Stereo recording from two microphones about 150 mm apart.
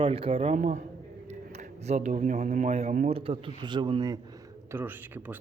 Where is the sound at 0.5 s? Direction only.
55° right (ahead or behind).